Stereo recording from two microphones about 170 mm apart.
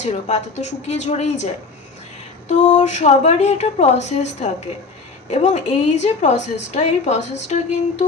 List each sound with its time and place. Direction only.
0.0 s a woman's voice: 40° left (ahead or behind)